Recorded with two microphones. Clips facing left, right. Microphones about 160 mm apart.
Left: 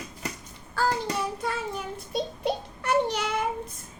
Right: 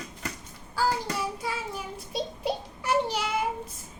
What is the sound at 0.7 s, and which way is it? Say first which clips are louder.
Child singing: left 1 dB; 5° right (ahead or behind).